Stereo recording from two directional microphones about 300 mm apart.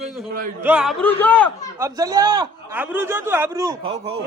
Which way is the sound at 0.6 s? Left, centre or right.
Centre.